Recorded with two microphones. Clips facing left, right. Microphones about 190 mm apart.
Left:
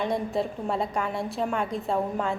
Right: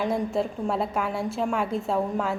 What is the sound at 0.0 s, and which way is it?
A woman's voice, centre (ahead or behind).